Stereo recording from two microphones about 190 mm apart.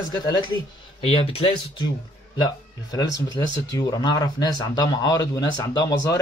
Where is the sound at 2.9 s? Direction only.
20° left (ahead or behind).